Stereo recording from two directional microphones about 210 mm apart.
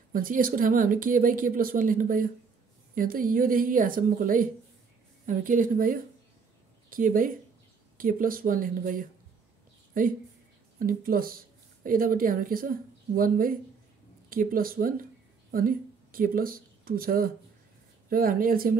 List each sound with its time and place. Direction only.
0.1 s speech: 40° right (ahead or behind)